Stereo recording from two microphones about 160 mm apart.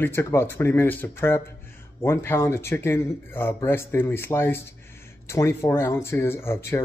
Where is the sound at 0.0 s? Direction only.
15° left (ahead or behind).